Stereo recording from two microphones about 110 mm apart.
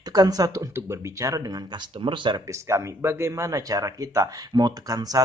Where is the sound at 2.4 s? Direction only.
25° right (ahead or behind).